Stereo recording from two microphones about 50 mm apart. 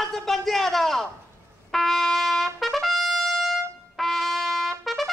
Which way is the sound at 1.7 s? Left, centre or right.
Centre.